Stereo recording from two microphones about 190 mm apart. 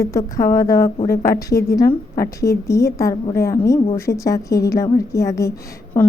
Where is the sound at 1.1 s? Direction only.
50° left (ahead or behind).